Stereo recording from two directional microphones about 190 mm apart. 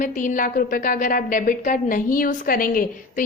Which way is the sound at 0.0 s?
45° left (ahead or behind).